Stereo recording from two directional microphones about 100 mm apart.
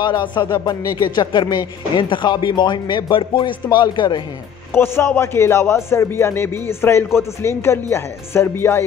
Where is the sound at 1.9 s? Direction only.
55° left (ahead or behind).